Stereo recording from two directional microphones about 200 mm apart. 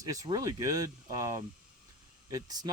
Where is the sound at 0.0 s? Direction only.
15° right (ahead or behind).